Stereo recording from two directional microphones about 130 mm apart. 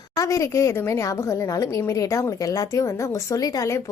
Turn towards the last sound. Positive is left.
turn(degrees=25)  # may be behind; listen again after turning